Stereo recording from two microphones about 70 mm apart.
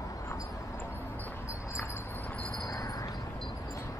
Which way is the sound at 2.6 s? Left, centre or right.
Left.